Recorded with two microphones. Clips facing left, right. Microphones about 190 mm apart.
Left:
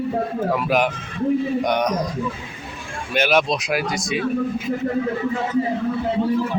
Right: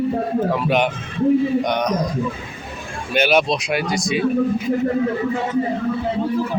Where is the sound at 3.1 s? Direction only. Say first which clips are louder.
Right 2 dB; centre (ahead or behind).